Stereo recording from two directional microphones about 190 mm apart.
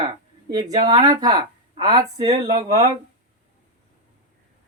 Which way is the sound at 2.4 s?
35° right (ahead or behind).